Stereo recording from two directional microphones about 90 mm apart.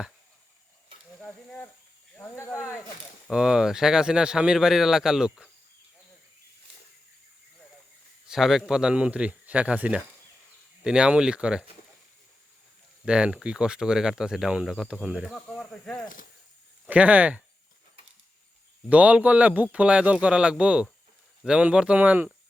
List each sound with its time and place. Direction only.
1.2 s speech: 15° left (ahead or behind)
2.3 s speech: 35° left (ahead or behind)
3.2 s speech: 10° right (ahead or behind)
8.3 s speech: 5° right (ahead or behind)
13.1 s speech: 10° right (ahead or behind)
15.4 s speech: 10° left (ahead or behind)
16.8 s speech: 15° right (ahead or behind)
18.9 s speech: 15° right (ahead or behind)